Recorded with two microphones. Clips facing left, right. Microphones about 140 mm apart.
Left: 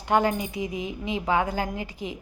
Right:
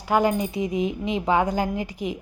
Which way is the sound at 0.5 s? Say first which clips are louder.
Right 6 dB; 20° right (ahead or behind).